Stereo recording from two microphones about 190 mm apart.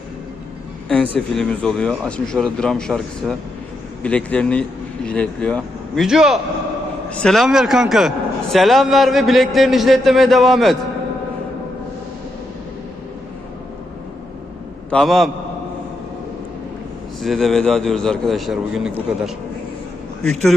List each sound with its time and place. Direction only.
1.3 s a man's voice: 5° left (ahead or behind)
14.8 s a man's voice: 5° left (ahead or behind)
17.2 s a man's voice: centre (ahead or behind)